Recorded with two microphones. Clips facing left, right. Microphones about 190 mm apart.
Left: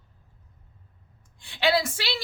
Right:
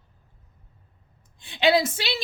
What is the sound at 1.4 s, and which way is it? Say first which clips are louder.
Speech: right 3 dB; 20° right (ahead or behind).